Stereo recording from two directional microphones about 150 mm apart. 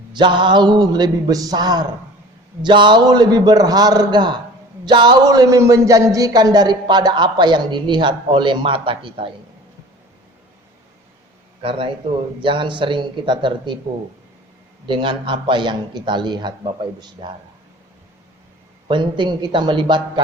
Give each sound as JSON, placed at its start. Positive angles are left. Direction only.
{"t": 0.1, "sound": "a man's voice", "side_deg": -30}
{"t": 11.6, "sound": "a man's voice", "side_deg": -35}
{"t": 14.8, "sound": "a man's voice", "side_deg": -35}
{"t": 18.9, "sound": "a man's voice", "side_deg": -30}